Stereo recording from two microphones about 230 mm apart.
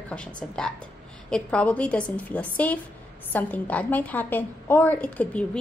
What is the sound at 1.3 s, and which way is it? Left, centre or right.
A woman's voice, centre.